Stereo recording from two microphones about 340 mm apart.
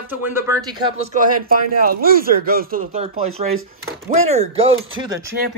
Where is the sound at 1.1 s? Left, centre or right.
Right.